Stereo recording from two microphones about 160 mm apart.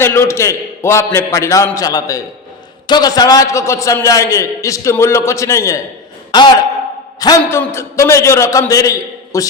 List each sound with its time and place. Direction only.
0.0 s a man's voice: 15° left (ahead or behind)
7.2 s a man's voice: 25° left (ahead or behind)